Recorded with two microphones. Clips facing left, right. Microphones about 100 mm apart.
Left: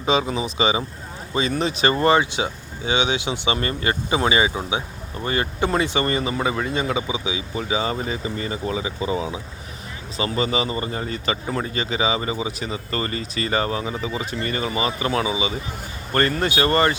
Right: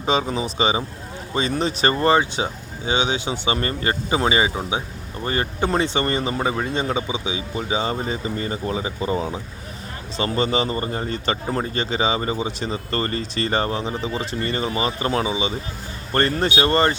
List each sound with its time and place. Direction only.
0.0 s speech: 35° right (ahead or behind)
10.2 s speech: 35° right (ahead or behind)